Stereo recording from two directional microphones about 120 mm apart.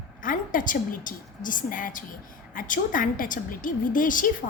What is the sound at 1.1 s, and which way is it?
A woman's voice, 90° left.